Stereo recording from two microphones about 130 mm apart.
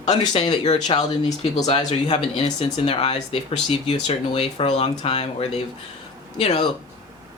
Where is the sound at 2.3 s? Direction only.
50° left (ahead or behind).